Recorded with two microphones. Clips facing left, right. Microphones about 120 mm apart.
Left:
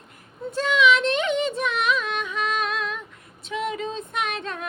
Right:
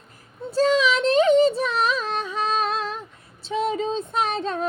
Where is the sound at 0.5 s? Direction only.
35° right (ahead or behind).